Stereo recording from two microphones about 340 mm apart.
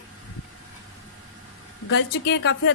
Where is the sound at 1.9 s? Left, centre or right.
Left.